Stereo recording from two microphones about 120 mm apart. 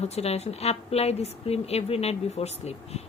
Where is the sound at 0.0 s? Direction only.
60° left (ahead or behind).